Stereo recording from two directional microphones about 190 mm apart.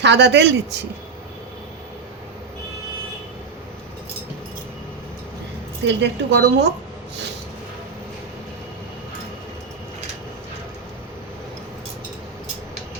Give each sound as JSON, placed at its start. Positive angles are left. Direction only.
{"t": 0.0, "sound": "speech", "side_deg": -65}
{"t": 5.8, "sound": "speech", "side_deg": -70}